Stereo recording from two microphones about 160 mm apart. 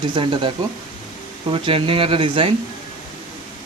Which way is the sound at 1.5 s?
35° right (ahead or behind).